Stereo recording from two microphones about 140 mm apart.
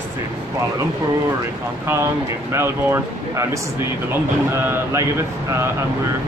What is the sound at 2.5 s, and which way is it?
Speech, 20° right (ahead or behind).